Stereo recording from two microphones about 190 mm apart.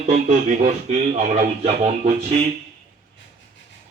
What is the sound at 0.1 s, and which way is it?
A man's voice, 35° right (ahead or behind).